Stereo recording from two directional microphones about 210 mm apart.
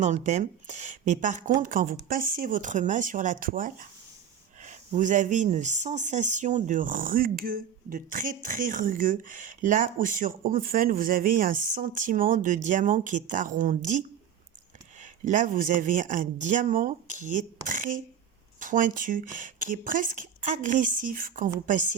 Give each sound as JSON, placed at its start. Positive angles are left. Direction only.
{"t": 0.0, "sound": "speech", "side_deg": -35}